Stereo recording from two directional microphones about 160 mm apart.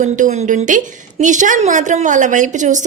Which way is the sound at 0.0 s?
50° right (ahead or behind).